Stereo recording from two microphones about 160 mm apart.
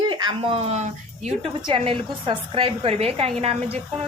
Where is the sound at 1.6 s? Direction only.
35° right (ahead or behind).